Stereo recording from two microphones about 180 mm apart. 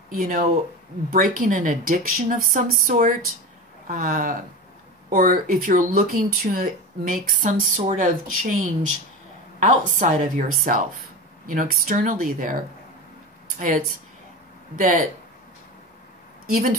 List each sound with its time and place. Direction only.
0.1 s speech: 50° right (ahead or behind)